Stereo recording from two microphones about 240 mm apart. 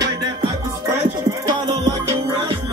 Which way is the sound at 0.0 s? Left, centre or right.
Centre.